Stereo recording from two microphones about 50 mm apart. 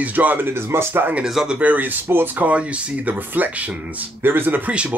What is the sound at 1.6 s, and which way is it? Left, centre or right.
Speech, right.